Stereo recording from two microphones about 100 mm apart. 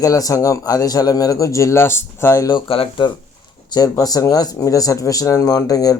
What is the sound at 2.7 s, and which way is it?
Speech, 70° left (ahead or behind).